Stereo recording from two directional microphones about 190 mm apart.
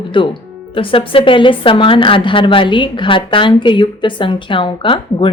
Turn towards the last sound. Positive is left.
turn(degrees=25)  # may be behind; listen again after turning